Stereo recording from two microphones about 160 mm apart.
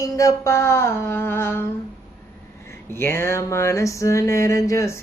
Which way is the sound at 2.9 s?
15° left (ahead or behind).